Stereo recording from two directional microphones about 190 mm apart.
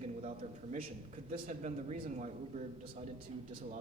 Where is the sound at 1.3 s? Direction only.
35° right (ahead or behind).